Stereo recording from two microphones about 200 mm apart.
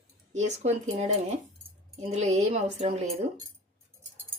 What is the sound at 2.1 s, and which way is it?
Speech, 35° right (ahead or behind).